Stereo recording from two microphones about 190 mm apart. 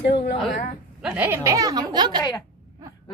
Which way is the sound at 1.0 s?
10° right (ahead or behind).